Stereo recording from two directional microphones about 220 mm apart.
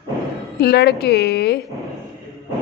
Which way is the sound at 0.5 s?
50° left (ahead or behind).